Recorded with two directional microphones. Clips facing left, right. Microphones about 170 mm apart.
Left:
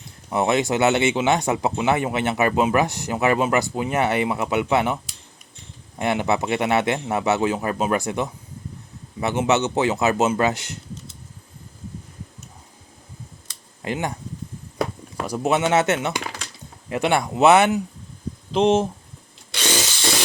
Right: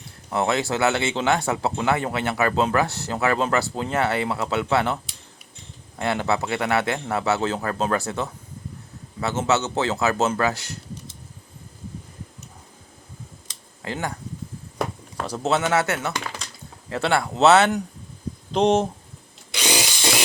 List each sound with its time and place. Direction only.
0.3 s speech: 20° left (ahead or behind)
6.0 s speech: 20° left (ahead or behind)
13.8 s speech: 20° left (ahead or behind)
15.2 s speech: 15° left (ahead or behind)
18.5 s speech: centre (ahead or behind)
19.5 s power tool: 10° right (ahead or behind)